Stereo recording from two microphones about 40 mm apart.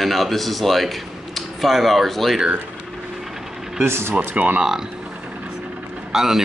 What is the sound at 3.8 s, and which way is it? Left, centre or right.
Speech, right.